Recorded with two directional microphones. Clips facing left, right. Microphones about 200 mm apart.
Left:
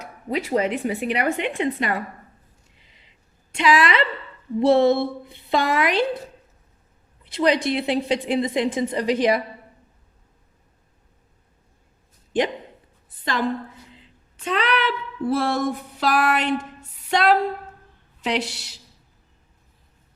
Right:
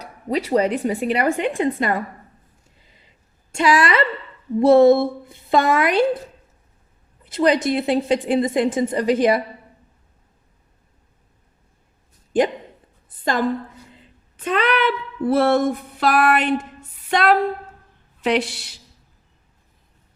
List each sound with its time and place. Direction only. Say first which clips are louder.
0.0 s a woman's voice: right 3 dB; 35° right (ahead or behind)
3.5 s a woman's voice: right 2 dB; 45° right (ahead or behind)
7.3 s a woman's voice: right 2 dB; 45° right (ahead or behind)
14.4 s a sound: right 3 dB; 50° right (ahead or behind)